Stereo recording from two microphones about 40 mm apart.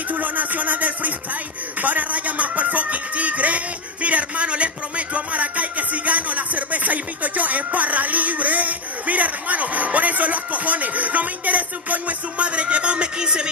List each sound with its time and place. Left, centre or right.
0.1 s music: right
1.8 s speech: right